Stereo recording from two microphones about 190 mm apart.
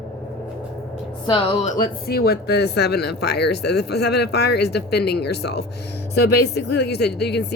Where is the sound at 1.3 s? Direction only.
35° left (ahead or behind).